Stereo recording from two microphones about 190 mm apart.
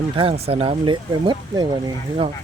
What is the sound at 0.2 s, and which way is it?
Speech, 30° right (ahead or behind).